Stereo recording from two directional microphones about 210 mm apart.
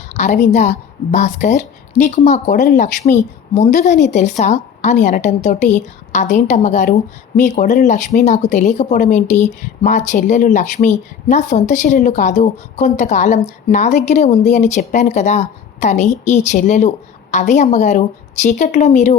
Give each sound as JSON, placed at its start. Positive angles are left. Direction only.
{"t": 0.1, "sound": "a woman's voice", "side_deg": 35}